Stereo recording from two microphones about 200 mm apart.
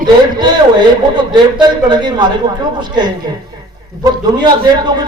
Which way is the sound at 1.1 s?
20° right (ahead or behind).